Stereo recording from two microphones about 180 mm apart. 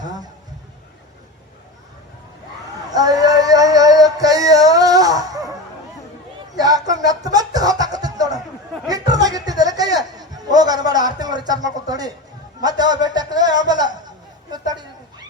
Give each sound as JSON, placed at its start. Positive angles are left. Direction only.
{"t": 2.9, "sound": "male singing", "side_deg": -20}
{"t": 6.6, "sound": "music", "side_deg": -20}
{"t": 8.9, "sound": "a sound", "side_deg": -20}